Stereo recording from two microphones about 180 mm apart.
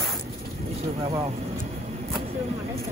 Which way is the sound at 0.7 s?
35° right (ahead or behind).